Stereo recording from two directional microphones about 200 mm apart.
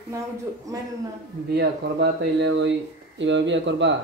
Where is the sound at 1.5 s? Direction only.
55° right (ahead or behind).